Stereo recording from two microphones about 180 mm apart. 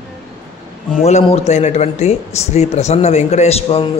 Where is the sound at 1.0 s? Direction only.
40° left (ahead or behind).